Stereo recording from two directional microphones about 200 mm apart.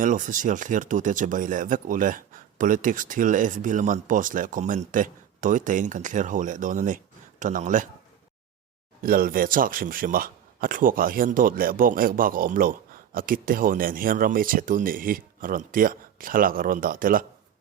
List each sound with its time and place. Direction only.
0.0 s speech: 40° right (ahead or behind)
9.0 s speech: 45° right (ahead or behind)